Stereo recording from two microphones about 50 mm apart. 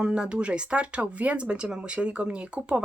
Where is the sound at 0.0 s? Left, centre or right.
Centre.